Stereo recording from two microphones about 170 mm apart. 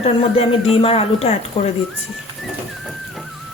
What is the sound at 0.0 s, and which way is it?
Speech, 35° left (ahead or behind).